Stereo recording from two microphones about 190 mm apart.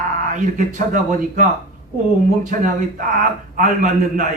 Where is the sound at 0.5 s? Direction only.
45° right (ahead or behind).